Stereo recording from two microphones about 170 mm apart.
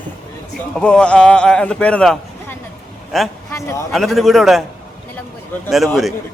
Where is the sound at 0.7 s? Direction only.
5° left (ahead or behind).